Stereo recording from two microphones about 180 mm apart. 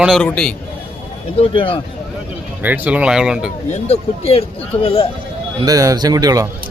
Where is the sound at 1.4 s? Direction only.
30° left (ahead or behind).